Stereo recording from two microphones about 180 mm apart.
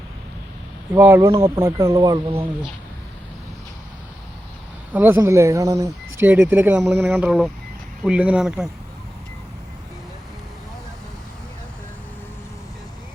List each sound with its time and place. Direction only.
0.9 s speech: 15° right (ahead or behind); by 2.7 s 30° right (ahead or behind)
4.9 s speech: 10° right (ahead or behind)